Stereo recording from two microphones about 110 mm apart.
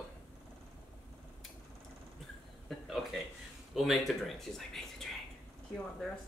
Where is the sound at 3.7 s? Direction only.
Centre (ahead or behind).